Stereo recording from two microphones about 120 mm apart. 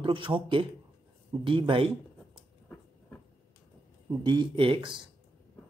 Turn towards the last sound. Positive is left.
turn(degrees=-45)  # may be behind; listen again after turning